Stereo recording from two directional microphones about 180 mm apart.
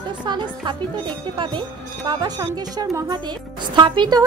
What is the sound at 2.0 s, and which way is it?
Speech, 25° right (ahead or behind).